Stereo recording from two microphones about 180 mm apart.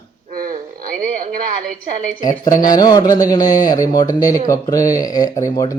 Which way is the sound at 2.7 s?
20° left (ahead or behind).